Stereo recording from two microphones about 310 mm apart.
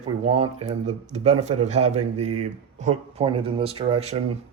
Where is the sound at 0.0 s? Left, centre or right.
Centre.